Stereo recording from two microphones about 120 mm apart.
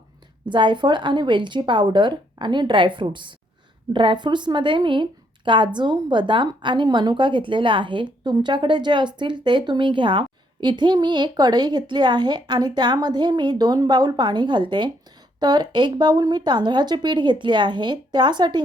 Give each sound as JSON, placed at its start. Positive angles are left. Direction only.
{"t": 0.4, "sound": "a woman's voice", "side_deg": -40}